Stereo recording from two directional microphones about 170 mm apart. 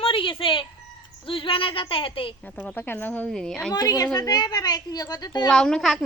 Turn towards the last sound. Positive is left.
turn(degrees=0)  # may be behind; listen again after turning